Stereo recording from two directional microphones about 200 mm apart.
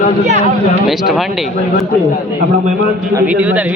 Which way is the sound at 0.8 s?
Centre (ahead or behind).